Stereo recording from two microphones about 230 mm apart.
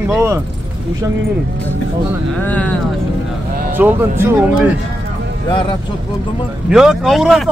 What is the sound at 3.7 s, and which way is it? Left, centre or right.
Speech, centre.